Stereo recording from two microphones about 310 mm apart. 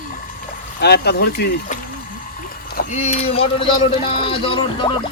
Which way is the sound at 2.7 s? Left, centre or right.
Left.